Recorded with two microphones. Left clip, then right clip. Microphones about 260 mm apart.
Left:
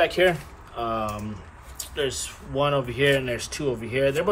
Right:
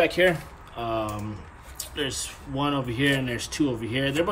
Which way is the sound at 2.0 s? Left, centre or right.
Right.